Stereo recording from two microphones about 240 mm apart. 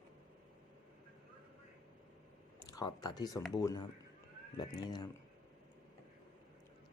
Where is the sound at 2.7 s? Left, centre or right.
Centre.